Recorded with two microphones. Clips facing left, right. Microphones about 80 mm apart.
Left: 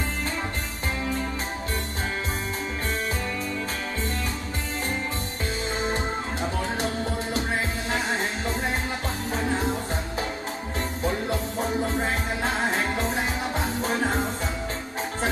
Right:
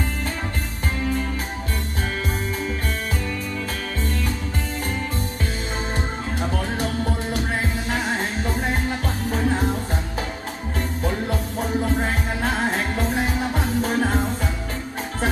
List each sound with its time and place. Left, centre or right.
12.0 s music: left